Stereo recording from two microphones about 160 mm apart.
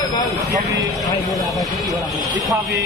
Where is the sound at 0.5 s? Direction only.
20° right (ahead or behind).